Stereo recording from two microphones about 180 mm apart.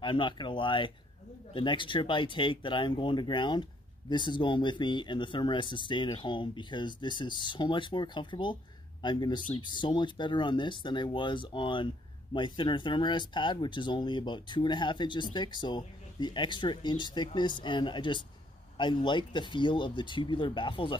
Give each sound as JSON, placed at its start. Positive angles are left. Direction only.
{"t": 0.0, "sound": "speech", "side_deg": 25}